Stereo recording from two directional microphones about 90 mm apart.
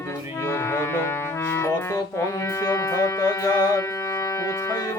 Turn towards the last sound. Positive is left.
turn(degrees=45)  # may be behind; listen again after turning